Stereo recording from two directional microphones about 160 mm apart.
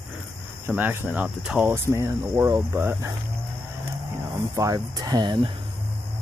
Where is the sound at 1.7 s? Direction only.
15° right (ahead or behind).